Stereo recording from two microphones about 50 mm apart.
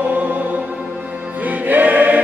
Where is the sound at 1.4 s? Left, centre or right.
Right.